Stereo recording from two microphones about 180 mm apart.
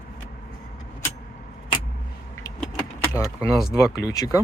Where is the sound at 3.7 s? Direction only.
20° left (ahead or behind).